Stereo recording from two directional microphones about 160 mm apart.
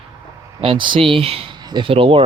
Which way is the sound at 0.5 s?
30° right (ahead or behind).